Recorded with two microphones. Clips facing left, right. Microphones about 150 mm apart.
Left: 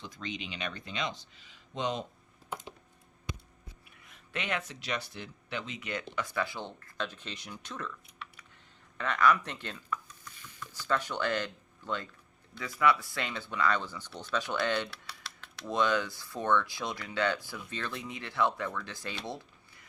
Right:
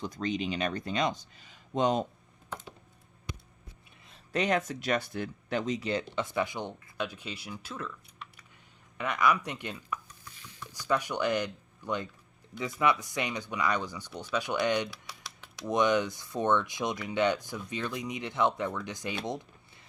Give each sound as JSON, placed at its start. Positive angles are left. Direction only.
{"t": 0.0, "sound": "speech", "side_deg": -40}
{"t": 4.0, "sound": "speech", "side_deg": -35}
{"t": 9.0, "sound": "chopping", "side_deg": -10}
{"t": 10.6, "sound": "speech", "side_deg": -15}
{"t": 19.2, "sound": "a sound", "side_deg": -20}